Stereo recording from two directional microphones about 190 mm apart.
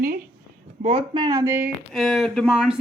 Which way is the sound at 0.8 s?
35° right (ahead or behind).